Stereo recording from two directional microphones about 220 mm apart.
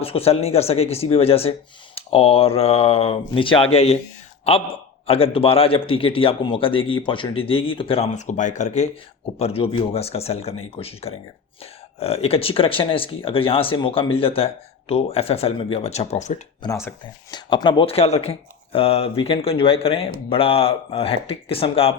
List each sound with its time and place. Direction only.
0.0 s a man's voice: 25° left (ahead or behind)
16.6 s a man's voice: 15° left (ahead or behind)